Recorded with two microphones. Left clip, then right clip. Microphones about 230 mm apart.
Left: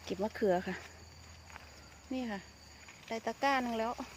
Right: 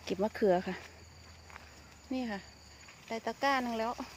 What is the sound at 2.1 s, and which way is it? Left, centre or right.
Speech, centre.